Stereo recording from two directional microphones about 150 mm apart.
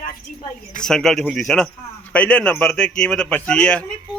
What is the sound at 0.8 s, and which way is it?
A man's voice, 5° left (ahead or behind).